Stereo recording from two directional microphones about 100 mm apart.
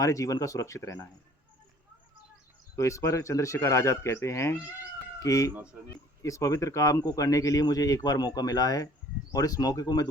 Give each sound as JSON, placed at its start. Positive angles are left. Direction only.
{"t": 0.0, "sound": "speech", "side_deg": 35}
{"t": 2.7, "sound": "speech", "side_deg": 30}